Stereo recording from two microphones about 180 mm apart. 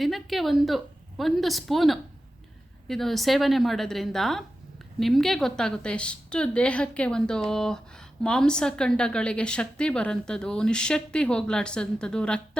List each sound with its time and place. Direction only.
0.0 s a woman's voice: centre (ahead or behind)